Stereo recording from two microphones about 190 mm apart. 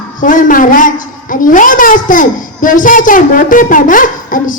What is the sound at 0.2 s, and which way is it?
A woman's voice, 45° left (ahead or behind).